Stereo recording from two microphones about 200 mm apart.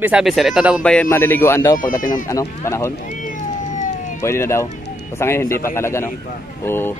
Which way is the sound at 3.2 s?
40° left (ahead or behind).